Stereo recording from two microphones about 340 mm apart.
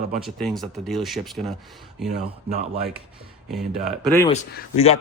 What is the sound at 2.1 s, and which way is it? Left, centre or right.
Speech, right.